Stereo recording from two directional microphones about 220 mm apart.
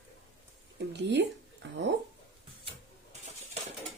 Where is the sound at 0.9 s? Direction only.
50° right (ahead or behind).